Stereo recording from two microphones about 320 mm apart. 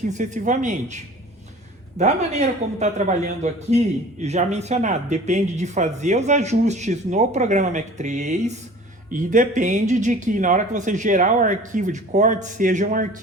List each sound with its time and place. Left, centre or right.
0.1 s a man's voice: right